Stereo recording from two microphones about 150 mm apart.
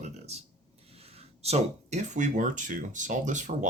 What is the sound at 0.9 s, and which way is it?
Speech, 40° right (ahead or behind).